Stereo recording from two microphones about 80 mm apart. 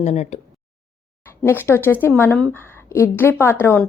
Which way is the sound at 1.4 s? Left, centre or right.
Left.